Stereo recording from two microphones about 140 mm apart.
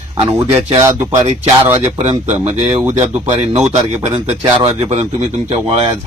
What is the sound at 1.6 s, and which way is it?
Speech, 15° right (ahead or behind).